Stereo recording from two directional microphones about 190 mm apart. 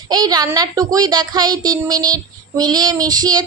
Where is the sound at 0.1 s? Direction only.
20° right (ahead or behind).